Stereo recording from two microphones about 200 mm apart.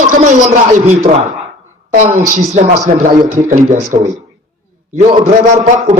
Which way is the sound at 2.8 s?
40° right (ahead or behind).